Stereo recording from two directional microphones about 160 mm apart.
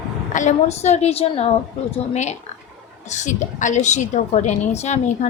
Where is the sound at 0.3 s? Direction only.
45° left (ahead or behind).